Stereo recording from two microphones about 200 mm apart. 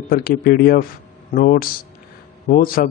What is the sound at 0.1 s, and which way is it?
Speech, 50° left (ahead or behind).